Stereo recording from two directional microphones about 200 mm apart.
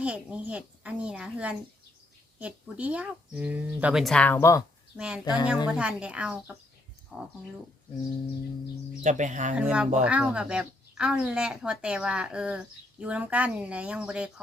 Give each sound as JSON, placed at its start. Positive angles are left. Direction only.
{"t": 0.0, "sound": "speech", "side_deg": -5}
{"t": 4.9, "sound": "speech", "side_deg": -5}
{"t": 5.2, "sound": "speech", "side_deg": 20}
{"t": 5.6, "sound": "speech", "side_deg": -5}
{"t": 9.0, "sound": "speech", "side_deg": -40}
{"t": 9.6, "sound": "speech", "side_deg": -5}